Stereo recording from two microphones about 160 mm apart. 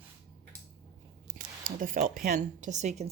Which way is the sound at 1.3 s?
55° right (ahead or behind).